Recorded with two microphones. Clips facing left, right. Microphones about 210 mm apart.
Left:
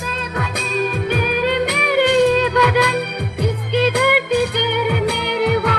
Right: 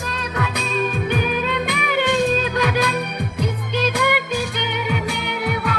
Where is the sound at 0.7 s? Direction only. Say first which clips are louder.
Left 3 dB; 45° left (ahead or behind).